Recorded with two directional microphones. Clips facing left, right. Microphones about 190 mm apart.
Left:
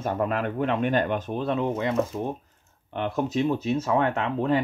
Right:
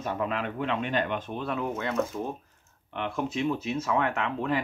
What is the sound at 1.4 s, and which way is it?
Speech, 30° left (ahead or behind).